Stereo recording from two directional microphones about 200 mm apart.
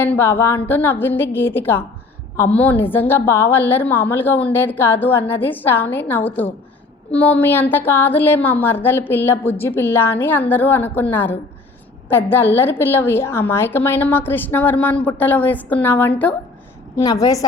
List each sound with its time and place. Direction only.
0.0 s a woman's voice: 10° left (ahead or behind)